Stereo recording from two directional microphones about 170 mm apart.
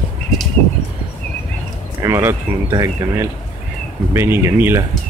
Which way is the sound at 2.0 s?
15° right (ahead or behind).